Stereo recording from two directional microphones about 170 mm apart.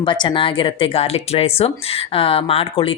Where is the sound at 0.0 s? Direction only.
30° left (ahead or behind).